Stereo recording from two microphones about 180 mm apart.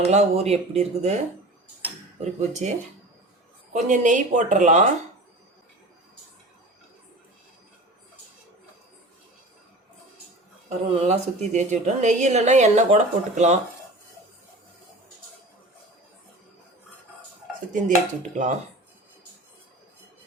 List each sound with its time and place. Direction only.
0.0 s a woman's voice: 35° right (ahead or behind)
2.5 s a woman's voice: 40° right (ahead or behind)
10.7 s a woman's voice: 35° right (ahead or behind)
17.8 s a woman's voice: 45° right (ahead or behind)